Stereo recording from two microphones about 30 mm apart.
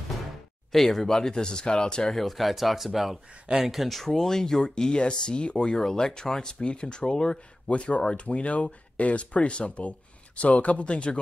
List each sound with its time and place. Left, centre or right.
0.7 s speech: centre
1.0 s speech: left
2.1 s speech: centre
4.0 s speech: centre
4.6 s speech: left
5.8 s speech: centre
6.6 s speech: left
7.6 s speech: left